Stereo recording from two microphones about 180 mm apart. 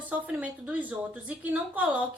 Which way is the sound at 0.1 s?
10° right (ahead or behind).